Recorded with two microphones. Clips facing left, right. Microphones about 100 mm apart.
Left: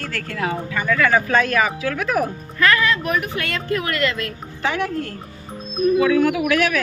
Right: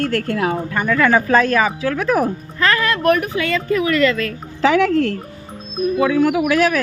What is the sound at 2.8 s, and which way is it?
Speech, 55° right (ahead or behind).